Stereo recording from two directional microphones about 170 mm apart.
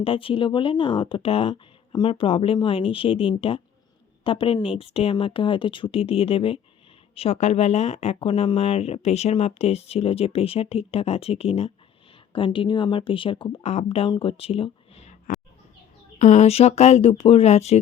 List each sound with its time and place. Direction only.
0.0 s speech: 30° left (ahead or behind)
16.1 s speech: 45° left (ahead or behind)